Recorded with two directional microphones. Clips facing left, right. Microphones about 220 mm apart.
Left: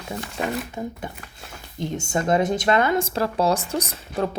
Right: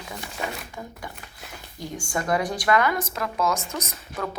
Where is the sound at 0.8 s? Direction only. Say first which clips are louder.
Left 7 dB; 25° left (ahead or behind).